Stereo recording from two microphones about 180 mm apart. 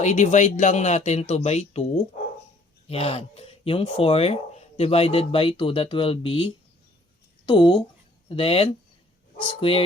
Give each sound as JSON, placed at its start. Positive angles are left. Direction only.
{"t": 0.0, "sound": "speech", "side_deg": 40}